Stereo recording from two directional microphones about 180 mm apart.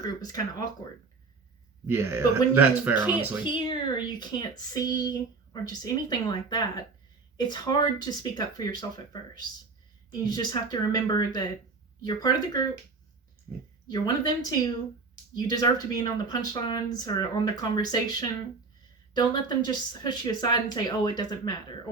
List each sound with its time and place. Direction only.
0.8 s speech: 20° left (ahead or behind)
1.9 s speech: 15° right (ahead or behind)
3.4 s speech: 25° left (ahead or behind)
10.1 s speech: 25° left (ahead or behind)
13.8 s speech: 25° left (ahead or behind)